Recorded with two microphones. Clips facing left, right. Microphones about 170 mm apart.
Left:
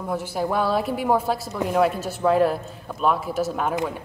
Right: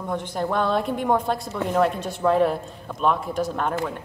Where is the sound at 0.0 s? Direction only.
5° left (ahead or behind).